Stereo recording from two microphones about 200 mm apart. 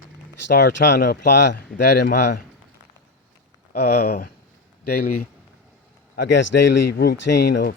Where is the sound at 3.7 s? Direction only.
55° left (ahead or behind).